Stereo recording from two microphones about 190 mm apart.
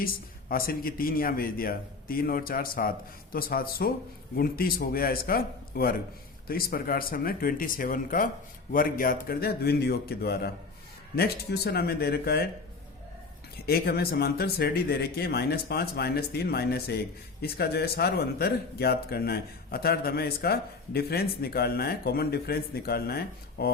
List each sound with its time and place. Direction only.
0.0 s speech: 50° left (ahead or behind)
13.7 s speech: 55° left (ahead or behind)